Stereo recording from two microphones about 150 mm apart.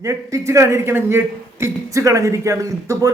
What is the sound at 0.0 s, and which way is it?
A man's voice, 20° right (ahead or behind).